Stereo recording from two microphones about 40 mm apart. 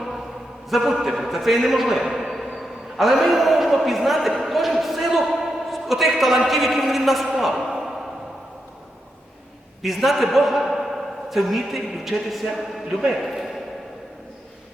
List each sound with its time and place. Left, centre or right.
0.7 s a man's voice: centre
9.8 s a man's voice: centre